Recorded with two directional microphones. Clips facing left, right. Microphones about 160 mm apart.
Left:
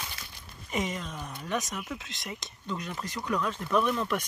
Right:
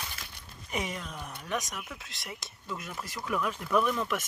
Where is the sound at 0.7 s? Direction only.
Centre (ahead or behind).